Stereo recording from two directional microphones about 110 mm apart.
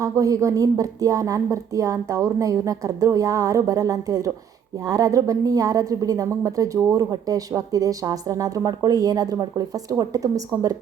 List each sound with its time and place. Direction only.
0.0 s a woman's voice: 30° right (ahead or behind)